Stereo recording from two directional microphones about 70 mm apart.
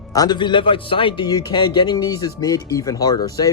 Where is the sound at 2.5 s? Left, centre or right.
Left.